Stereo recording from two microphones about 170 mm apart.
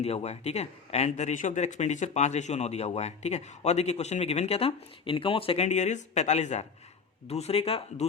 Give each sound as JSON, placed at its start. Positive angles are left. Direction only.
{"t": 0.0, "sound": "speech", "side_deg": 40}